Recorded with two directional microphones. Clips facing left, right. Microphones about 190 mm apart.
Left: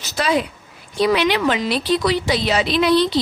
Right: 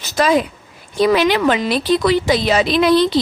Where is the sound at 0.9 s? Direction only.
45° right (ahead or behind).